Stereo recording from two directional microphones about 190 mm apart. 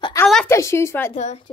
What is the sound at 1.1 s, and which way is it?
Speech, 35° left (ahead or behind).